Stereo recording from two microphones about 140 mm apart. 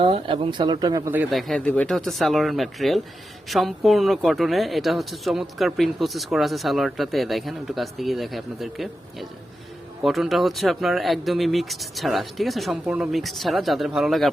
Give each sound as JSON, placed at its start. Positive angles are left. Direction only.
{"t": 0.3, "sound": "speech", "side_deg": -35}
{"t": 1.3, "sound": "speech", "side_deg": 0}